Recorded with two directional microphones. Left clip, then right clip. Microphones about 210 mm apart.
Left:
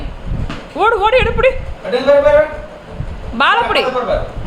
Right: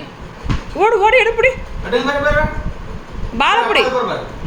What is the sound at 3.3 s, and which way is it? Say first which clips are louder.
Speech: left 1 dB; 10° left (ahead or behind).